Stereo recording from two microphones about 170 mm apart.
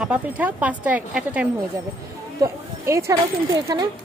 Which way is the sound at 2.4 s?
20° right (ahead or behind).